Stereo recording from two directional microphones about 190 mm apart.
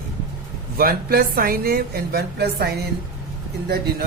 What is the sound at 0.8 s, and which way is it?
A woman's voice, 50° right (ahead or behind).